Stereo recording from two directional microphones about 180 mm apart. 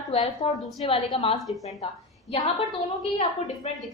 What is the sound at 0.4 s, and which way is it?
Speech, 25° left (ahead or behind).